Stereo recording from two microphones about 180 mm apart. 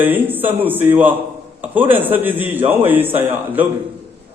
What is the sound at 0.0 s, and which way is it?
A man's voice, 10° right (ahead or behind).